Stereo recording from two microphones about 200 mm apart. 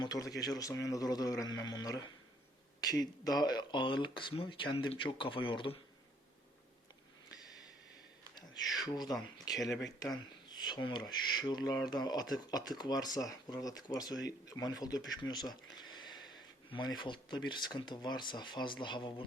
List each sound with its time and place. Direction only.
0.0 s speech: 20° left (ahead or behind)
8.8 s speech: 20° left (ahead or behind)